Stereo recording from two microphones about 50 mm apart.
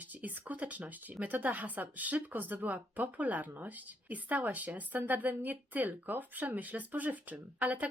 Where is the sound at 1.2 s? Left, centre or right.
Right.